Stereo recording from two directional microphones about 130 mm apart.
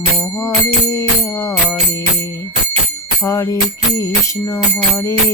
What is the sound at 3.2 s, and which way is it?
Music, 25° left (ahead or behind).